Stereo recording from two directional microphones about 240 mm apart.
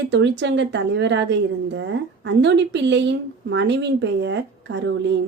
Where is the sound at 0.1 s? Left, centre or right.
Right.